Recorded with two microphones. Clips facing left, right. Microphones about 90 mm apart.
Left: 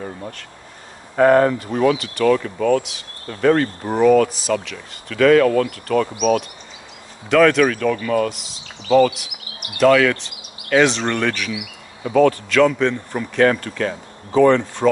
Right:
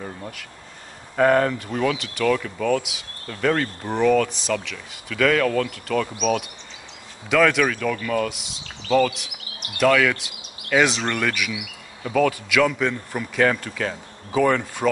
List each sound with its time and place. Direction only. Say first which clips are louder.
1.1 s speech: left 5 dB; 10° left (ahead or behind)
2.8 s speech: left 1 dB; 5° right (ahead or behind)
3.3 s speech: left 6 dB; 15° left (ahead or behind)
4.3 s speech: left 4 dB; 5° left (ahead or behind)
5.1 s speech: left 6 dB; 10° left (ahead or behind); by 11.5 s 5° right (ahead or behind)
12.0 s speech: left 5 dB; 20° left (ahead or behind)
12.3 s speech: left 5 dB; 5° right (ahead or behind)